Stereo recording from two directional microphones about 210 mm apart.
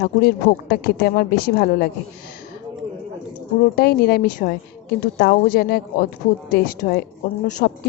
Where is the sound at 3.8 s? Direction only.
50° left (ahead or behind).